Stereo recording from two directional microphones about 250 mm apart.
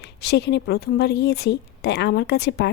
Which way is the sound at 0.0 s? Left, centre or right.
Left.